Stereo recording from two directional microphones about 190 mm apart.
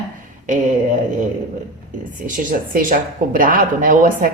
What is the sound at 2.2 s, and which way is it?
Speech, 50° right (ahead or behind).